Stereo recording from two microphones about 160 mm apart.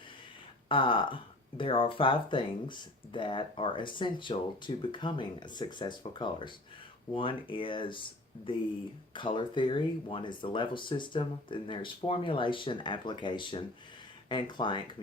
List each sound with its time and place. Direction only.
0.7 s speech: 30° left (ahead or behind)